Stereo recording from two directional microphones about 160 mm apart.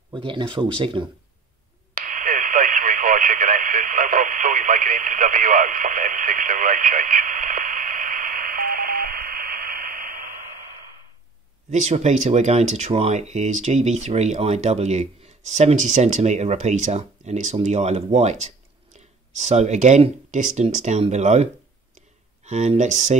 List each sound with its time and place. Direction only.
0.1 s speech: 30° right (ahead or behind)
2.0 s radio: 55° right (ahead or behind)
11.7 s speech: 45° right (ahead or behind)